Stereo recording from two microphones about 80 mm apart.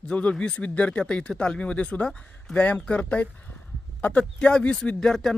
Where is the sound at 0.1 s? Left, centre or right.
Centre.